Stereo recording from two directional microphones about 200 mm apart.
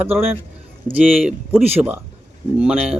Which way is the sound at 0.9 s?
Centre (ahead or behind).